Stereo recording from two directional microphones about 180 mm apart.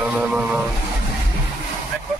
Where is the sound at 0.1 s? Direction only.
5° right (ahead or behind).